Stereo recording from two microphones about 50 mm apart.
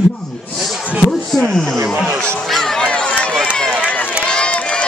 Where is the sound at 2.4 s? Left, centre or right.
Centre.